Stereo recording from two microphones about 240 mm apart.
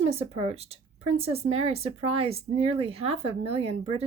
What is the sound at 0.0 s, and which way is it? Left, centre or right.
Speech, right.